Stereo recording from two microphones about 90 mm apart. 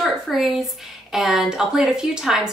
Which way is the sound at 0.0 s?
5° right (ahead or behind).